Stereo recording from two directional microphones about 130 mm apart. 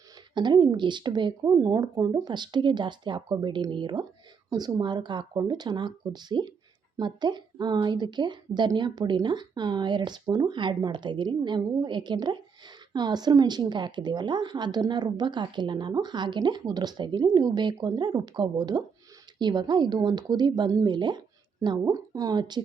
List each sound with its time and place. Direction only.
0.3 s a woman's voice: 35° right (ahead or behind)